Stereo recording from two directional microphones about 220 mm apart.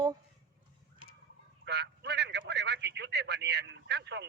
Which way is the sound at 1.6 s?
50° right (ahead or behind).